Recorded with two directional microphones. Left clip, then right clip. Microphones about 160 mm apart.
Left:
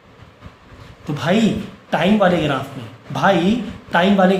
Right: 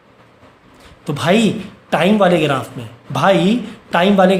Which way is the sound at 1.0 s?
55° right (ahead or behind).